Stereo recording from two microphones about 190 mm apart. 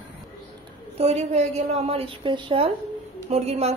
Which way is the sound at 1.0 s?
35° right (ahead or behind).